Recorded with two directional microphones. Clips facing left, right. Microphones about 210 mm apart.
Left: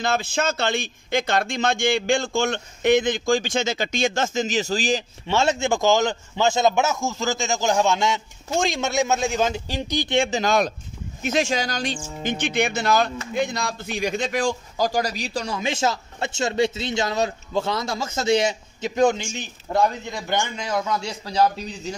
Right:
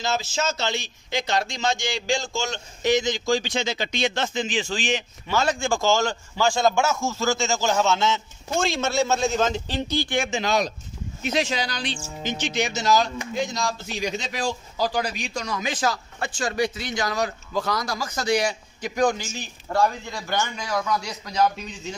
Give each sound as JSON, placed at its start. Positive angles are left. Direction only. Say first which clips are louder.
{"t": 0.0, "sound": "a man's voice", "louder": "left 3 dB", "side_deg": 55}
{"t": 10.3, "sound": "speech", "louder": "left 3 dB", "side_deg": 50}
{"t": 12.2, "sound": "a man's voice", "louder": "left 3 dB", "side_deg": 55}